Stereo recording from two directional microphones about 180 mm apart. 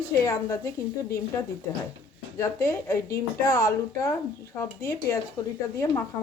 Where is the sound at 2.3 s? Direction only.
15° left (ahead or behind).